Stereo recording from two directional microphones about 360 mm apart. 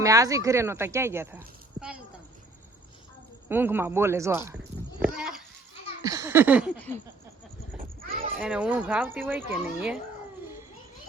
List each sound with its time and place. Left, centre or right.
0.0 s speech: centre
3.5 s speech: centre
5.0 s a sound: centre
6.0 s speech: centre
8.0 s a sound: right
8.4 s speech: centre